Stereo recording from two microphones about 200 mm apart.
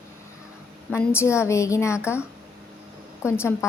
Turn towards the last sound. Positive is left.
turn(degrees=10)  # may be behind; listen again after turning